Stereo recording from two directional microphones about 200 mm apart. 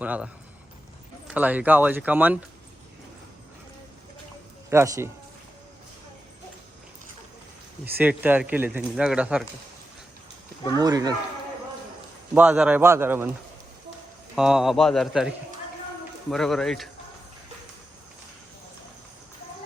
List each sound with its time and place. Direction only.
0.0 s speech: 5° right (ahead or behind)
1.3 s speech: 5° right (ahead or behind)
4.7 s speech: 15° right (ahead or behind)
7.9 s speech: 10° right (ahead or behind)
10.8 s speech: 20° right (ahead or behind)
12.3 s speech: 5° right (ahead or behind)
14.3 s speech: 5° right (ahead or behind)
16.3 s speech: centre (ahead or behind)